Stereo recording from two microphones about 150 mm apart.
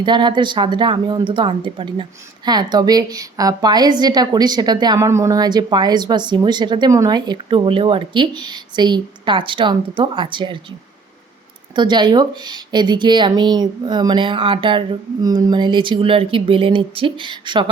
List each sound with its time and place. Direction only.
0.0 s a woman's voice: 30° right (ahead or behind)
11.7 s speech: 30° right (ahead or behind)